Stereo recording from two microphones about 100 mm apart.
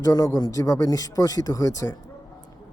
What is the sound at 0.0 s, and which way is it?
A man's voice, 40° left (ahead or behind).